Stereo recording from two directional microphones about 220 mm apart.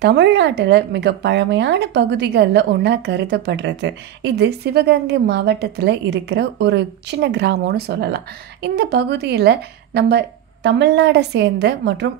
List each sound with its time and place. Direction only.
0.0 s speech: 50° right (ahead or behind)